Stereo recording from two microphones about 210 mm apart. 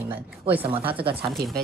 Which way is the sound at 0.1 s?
10° right (ahead or behind).